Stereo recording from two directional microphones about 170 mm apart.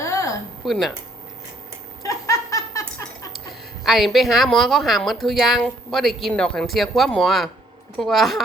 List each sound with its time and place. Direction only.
0.0 s a sound: 15° left (ahead or behind)
0.6 s speech: centre (ahead or behind)
2.0 s laughter: 20° left (ahead or behind)
3.8 s speech: centre (ahead or behind)